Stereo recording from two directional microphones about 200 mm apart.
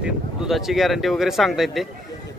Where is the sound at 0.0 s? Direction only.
5° right (ahead or behind).